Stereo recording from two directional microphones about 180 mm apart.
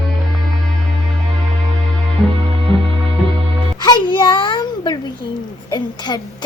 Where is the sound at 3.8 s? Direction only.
25° left (ahead or behind).